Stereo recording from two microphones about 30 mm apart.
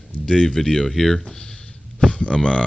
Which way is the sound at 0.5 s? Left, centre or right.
Centre.